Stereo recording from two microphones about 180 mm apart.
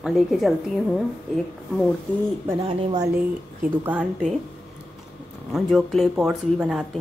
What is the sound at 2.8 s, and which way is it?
Speech, 25° right (ahead or behind).